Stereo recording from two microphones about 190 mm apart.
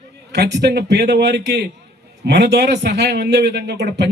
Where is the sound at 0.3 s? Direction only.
60° right (ahead or behind).